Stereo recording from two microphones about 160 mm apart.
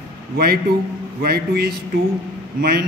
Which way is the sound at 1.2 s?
75° right (ahead or behind).